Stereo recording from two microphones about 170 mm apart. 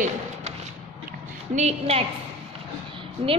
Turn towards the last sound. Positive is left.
turn(degrees=-35)  # may be behind; listen again after turning